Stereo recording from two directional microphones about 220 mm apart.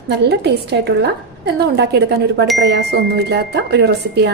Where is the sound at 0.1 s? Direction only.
50° right (ahead or behind).